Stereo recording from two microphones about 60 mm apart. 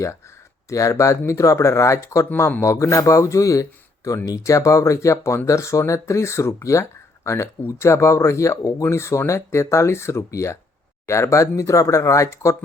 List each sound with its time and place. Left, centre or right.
0.7 s speech: left
7.3 s speech: left